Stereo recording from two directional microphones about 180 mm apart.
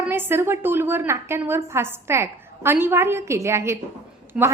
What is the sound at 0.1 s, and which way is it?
A woman's voice, 10° right (ahead or behind).